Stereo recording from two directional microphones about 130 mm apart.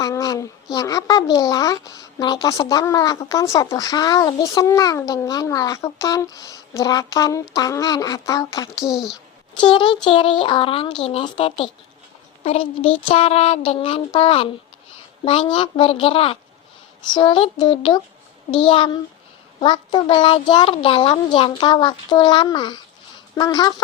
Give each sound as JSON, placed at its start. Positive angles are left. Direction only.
{"t": 0.0, "sound": "a child's voice", "side_deg": 30}
{"t": 8.7, "sound": "speech", "side_deg": -5}
{"t": 9.6, "sound": "a child's voice", "side_deg": 35}